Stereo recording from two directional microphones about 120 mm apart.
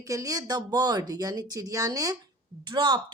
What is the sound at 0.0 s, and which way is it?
Speech, 30° right (ahead or behind).